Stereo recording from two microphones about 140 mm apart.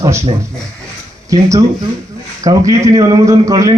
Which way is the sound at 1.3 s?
25° right (ahead or behind).